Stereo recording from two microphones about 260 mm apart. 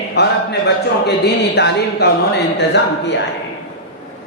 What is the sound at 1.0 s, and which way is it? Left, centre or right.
Speech, left.